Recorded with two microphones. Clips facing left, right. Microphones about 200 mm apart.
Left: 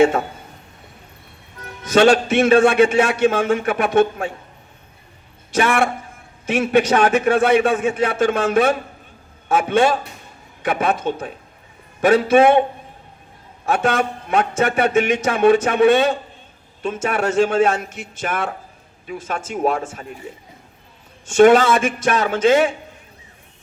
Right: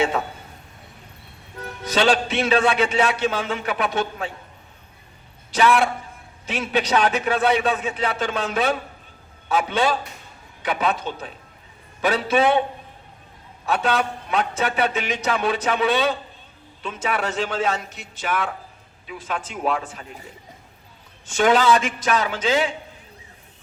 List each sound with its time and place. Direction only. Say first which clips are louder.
1.9 s a man's voice: left 7 dB; 50° left (ahead or behind)
5.5 s a man's voice: left 1 dB; 50° left (ahead or behind)
13.7 s a man's voice: left 3 dB; 50° left (ahead or behind)
21.2 s a man's voice: left 6 dB; 50° left (ahead or behind)